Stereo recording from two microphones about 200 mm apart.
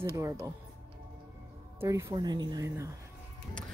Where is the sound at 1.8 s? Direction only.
15° right (ahead or behind).